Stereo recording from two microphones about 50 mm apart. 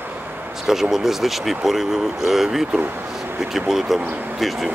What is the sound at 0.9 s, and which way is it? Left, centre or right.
Speech, centre.